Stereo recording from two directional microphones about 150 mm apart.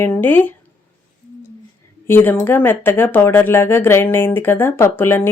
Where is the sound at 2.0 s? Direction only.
15° left (ahead or behind).